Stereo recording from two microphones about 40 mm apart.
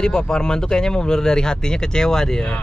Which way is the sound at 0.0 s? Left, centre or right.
Centre.